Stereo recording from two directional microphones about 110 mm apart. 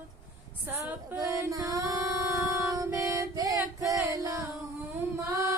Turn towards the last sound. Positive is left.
turn(degrees=-30)  # may be behind; listen again after turning